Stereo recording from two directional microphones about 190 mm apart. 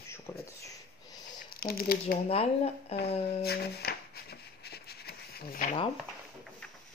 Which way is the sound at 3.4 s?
55° left (ahead or behind).